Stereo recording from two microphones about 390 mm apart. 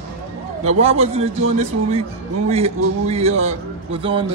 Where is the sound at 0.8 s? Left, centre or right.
Centre.